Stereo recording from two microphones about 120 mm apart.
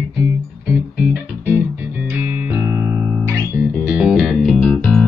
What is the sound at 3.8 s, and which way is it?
Music, 10° right (ahead or behind).